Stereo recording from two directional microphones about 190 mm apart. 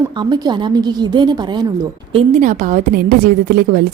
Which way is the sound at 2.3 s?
40° right (ahead or behind).